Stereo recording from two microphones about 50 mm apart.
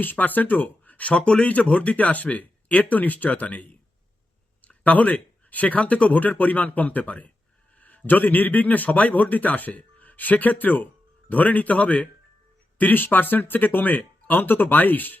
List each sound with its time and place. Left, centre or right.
0.0 s speech: left